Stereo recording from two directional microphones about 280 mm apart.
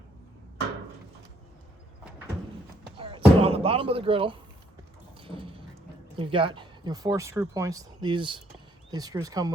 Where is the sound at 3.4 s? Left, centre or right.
Right.